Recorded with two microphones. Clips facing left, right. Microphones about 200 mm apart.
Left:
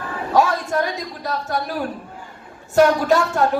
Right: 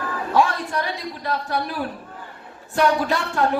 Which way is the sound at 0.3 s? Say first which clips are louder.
Left 3 dB; 45° left (ahead or behind).